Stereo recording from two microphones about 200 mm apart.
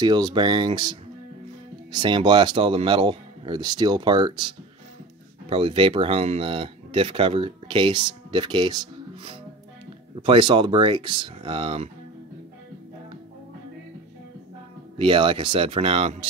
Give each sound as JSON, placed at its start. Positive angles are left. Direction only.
{"t": 0.0, "sound": "speech", "side_deg": -20}
{"t": 5.5, "sound": "speech", "side_deg": -25}
{"t": 15.0, "sound": "speech", "side_deg": -25}